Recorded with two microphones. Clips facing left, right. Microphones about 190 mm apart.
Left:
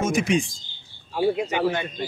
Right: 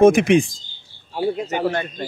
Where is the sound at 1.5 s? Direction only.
45° right (ahead or behind).